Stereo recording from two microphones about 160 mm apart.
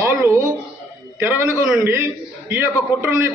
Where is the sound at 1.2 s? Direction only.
15° right (ahead or behind).